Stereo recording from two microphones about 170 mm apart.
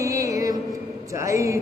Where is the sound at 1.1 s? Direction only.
15° right (ahead or behind).